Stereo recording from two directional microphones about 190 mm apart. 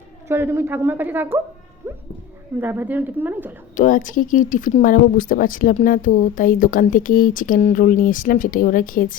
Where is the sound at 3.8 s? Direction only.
45° left (ahead or behind).